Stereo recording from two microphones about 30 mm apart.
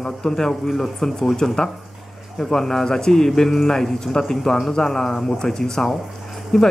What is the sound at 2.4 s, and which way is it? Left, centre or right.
Speech, centre.